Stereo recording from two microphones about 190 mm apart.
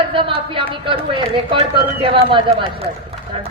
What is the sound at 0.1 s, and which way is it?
Speech, 25° right (ahead or behind).